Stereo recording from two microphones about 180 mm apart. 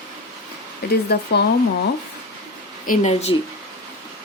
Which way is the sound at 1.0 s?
65° left (ahead or behind).